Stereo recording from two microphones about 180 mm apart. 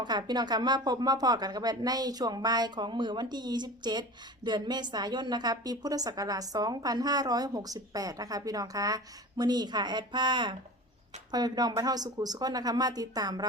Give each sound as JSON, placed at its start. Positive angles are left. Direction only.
{"t": 0.0, "sound": "a woman's voice", "side_deg": -25}